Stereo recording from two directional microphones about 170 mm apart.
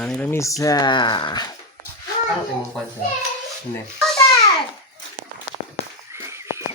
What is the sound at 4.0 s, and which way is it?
Babbling, centre (ahead or behind).